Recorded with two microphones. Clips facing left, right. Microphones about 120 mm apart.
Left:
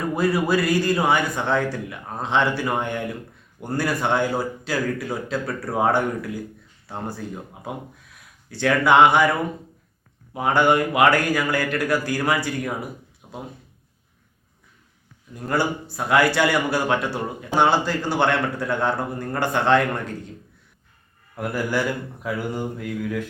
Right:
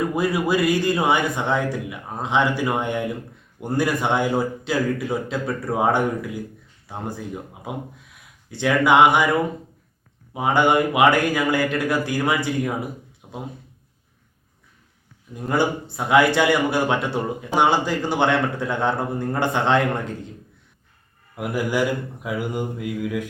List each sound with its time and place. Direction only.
0.2 s speech: 15° right (ahead or behind)
8.4 s speech: 20° right (ahead or behind)
10.3 s speech: 15° right (ahead or behind)
13.2 s a sound: 15° right (ahead or behind)
15.4 s speech: 20° right (ahead or behind)
21.3 s speech: 15° right (ahead or behind)